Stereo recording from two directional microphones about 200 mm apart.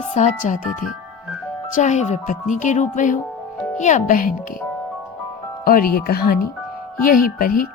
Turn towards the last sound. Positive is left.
turn(degrees=45)  # may be behind; listen again after turning